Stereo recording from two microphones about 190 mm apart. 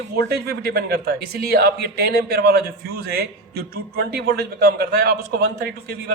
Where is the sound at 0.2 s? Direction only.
55° right (ahead or behind).